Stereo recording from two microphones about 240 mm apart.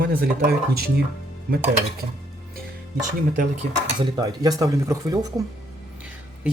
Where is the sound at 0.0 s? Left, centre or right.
Right.